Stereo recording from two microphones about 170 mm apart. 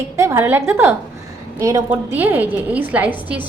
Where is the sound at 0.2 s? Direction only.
15° right (ahead or behind).